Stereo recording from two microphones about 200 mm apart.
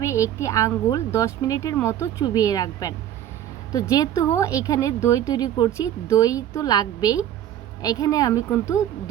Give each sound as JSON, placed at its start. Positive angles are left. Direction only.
{"t": 0.0, "sound": "speech", "side_deg": 15}